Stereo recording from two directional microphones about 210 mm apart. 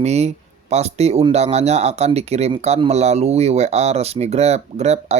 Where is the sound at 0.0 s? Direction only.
30° right (ahead or behind).